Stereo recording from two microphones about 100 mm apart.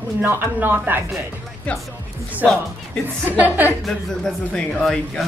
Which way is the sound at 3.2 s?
15° right (ahead or behind).